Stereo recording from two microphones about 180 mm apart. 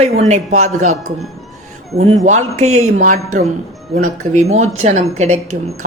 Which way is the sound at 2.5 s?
35° right (ahead or behind).